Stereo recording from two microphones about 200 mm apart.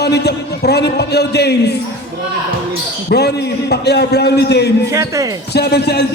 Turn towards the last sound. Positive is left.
turn(degrees=55)  # may be behind; listen again after turning